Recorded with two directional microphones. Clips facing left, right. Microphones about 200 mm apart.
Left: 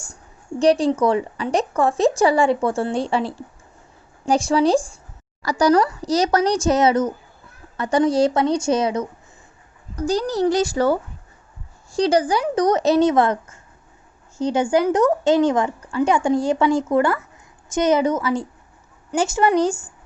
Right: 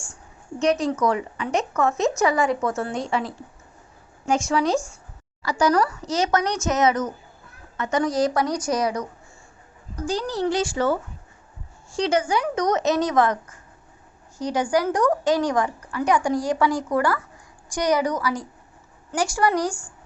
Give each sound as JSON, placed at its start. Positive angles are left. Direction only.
{"t": 0.6, "sound": "a woman's voice", "side_deg": 30}
{"t": 10.1, "sound": "a woman's voice", "side_deg": 40}